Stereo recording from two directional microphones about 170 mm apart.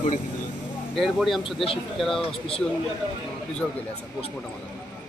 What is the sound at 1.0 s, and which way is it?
Speech, centre (ahead or behind).